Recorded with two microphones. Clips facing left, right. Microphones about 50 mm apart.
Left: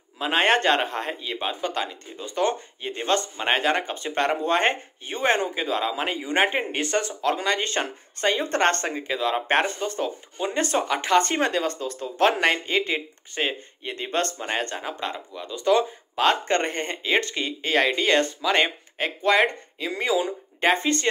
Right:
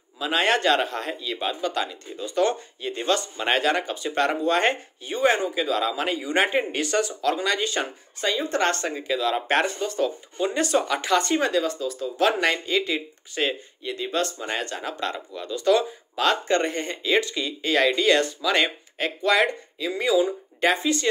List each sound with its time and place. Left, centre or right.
0.2 s speech: left
8.8 s speech: left
10.6 s speech: left
14.8 s speech: centre
16.4 s speech: left
20.7 s speech: left